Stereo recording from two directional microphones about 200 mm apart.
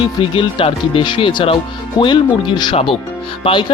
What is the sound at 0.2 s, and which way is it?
Speech, 25° left (ahead or behind).